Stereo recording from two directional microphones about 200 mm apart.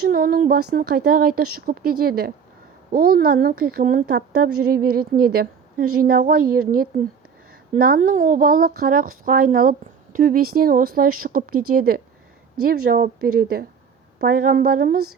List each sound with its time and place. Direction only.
0.0 s speech: 45° right (ahead or behind)